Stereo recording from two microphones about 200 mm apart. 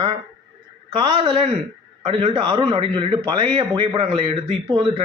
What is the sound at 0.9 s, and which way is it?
A man's voice, 25° right (ahead or behind).